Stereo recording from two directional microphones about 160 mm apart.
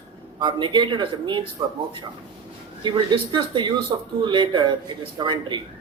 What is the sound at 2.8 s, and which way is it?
Speech, 30° right (ahead or behind).